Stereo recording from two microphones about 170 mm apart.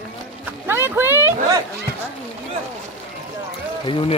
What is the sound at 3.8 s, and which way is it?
Speech, 30° left (ahead or behind).